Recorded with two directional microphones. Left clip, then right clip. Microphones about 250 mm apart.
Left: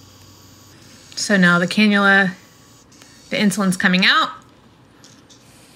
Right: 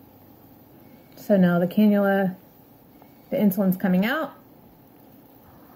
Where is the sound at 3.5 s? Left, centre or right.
Left.